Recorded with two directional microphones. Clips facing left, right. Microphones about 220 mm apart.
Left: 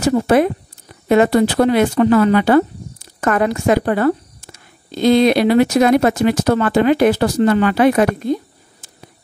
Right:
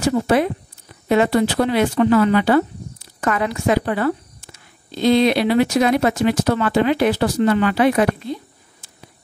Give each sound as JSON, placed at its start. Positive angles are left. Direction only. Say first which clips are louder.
{"t": 0.0, "sound": "a woman's voice", "louder": "left 4 dB", "side_deg": 45}